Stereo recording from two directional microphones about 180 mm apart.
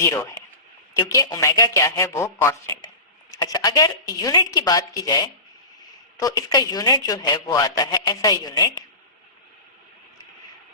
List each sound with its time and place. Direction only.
0.0 s speech: 15° left (ahead or behind)